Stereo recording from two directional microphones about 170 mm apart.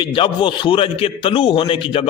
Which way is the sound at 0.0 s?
30° left (ahead or behind).